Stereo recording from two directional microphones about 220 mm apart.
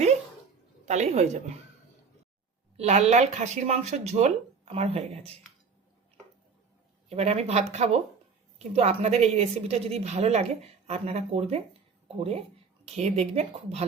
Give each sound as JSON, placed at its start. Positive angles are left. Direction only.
{"t": 0.9, "sound": "a woman's voice", "side_deg": -30}
{"t": 2.7, "sound": "a woman's voice", "side_deg": -30}
{"t": 7.1, "sound": "a woman's voice", "side_deg": -30}